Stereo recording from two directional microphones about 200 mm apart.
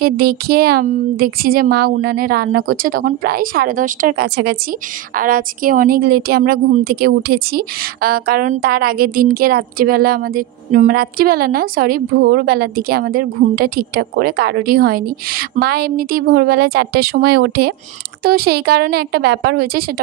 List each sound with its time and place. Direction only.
0.0 s a woman's voice: 50° right (ahead or behind)